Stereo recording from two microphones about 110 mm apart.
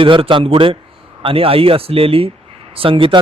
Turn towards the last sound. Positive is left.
turn(degrees=-50)  # may be behind; listen again after turning